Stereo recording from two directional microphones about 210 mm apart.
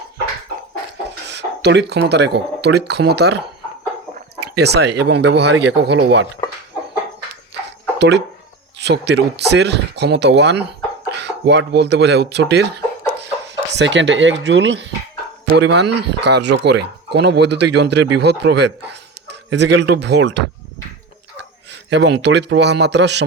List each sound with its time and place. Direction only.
1.3 s speech: 55° right (ahead or behind)
7.9 s a man's voice: 55° right (ahead or behind)
21.8 s a man's voice: 55° right (ahead or behind)